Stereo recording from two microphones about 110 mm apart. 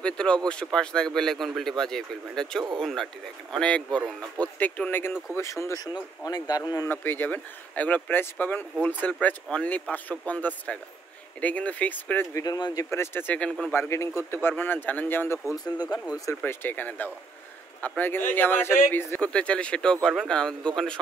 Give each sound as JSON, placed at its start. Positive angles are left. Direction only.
{"t": 0.0, "sound": "speech", "side_deg": 10}
{"t": 6.9, "sound": "speech", "side_deg": 20}
{"t": 12.4, "sound": "speech", "side_deg": 35}
{"t": 12.9, "sound": "speech", "side_deg": 20}
{"t": 13.7, "sound": "speech", "side_deg": 25}
{"t": 15.5, "sound": "speech", "side_deg": 35}
{"t": 16.3, "sound": "speech", "side_deg": 20}